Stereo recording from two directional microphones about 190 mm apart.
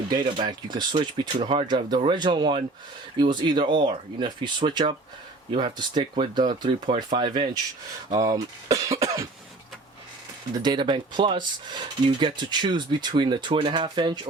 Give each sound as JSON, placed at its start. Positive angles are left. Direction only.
{"t": 0.1, "sound": "speech", "side_deg": -25}
{"t": 10.6, "sound": "speech", "side_deg": -25}